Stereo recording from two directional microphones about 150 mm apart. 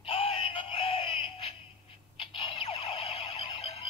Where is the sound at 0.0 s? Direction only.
40° left (ahead or behind).